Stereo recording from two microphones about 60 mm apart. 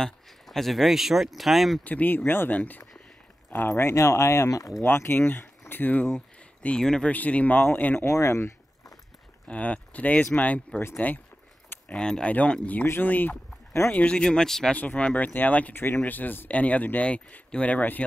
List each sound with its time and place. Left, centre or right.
0.0 s speech: centre
1.9 s speech: left
3.4 s a sound: left
3.7 s speech: left
4.9 s speech: left
6.8 s speech: centre
7.1 s speech: left
8.0 s speech: left
9.5 s speech: left
11.9 s speech: centre
12.3 s speech: left
13.9 s speech: centre
14.8 s speech: left